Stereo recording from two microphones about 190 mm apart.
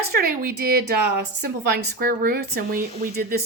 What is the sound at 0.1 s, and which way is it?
A woman's voice, 50° right (ahead or behind).